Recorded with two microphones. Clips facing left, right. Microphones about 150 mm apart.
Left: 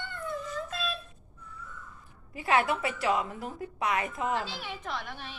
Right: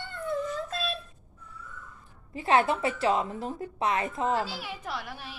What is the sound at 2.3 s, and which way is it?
Speech, 25° right (ahead or behind).